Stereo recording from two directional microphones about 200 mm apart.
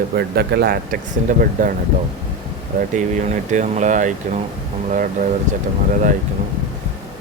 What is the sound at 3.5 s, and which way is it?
Speech, 40° right (ahead or behind).